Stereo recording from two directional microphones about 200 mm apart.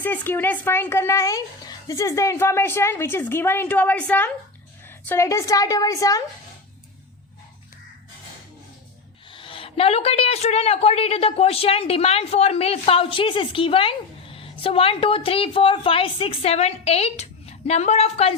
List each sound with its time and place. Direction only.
0.0 s speech: 10° left (ahead or behind)
9.3 s speech: 25° left (ahead or behind)